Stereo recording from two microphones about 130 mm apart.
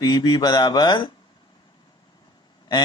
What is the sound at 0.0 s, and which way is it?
Speech, 30° left (ahead or behind).